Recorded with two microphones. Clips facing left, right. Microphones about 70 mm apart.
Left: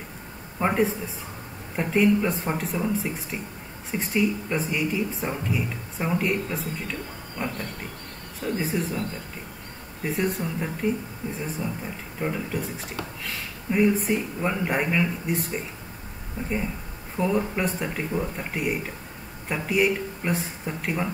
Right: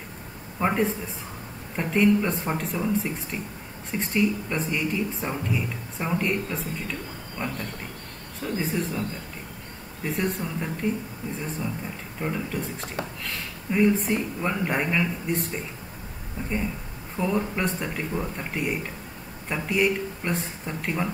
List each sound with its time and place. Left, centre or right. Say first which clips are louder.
0.6 s speech: left 1 dB; centre
10.0 s speech: left 1 dB; centre
16.4 s speech: left 1 dB; left
17.2 s speech: left 1 dB; centre